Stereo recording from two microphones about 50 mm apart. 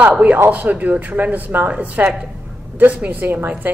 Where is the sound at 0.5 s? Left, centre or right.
Right.